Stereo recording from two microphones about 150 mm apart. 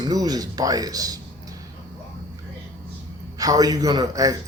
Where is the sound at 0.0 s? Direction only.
25° right (ahead or behind).